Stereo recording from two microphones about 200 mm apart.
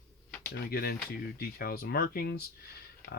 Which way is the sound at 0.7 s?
50° left (ahead or behind).